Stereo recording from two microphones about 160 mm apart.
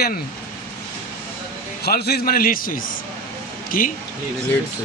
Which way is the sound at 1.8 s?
80° left.